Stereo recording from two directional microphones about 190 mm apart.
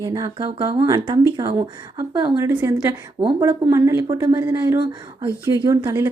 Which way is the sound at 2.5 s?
10° right (ahead or behind).